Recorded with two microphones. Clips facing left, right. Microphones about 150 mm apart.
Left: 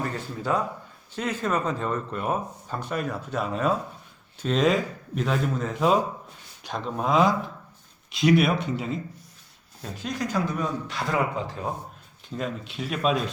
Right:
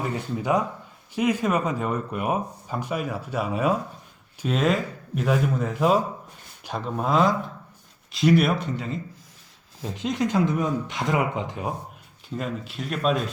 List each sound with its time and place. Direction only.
0.0 s speech: 15° right (ahead or behind)
9.9 s speech: 20° right (ahead or behind)
12.4 s speech: centre (ahead or behind)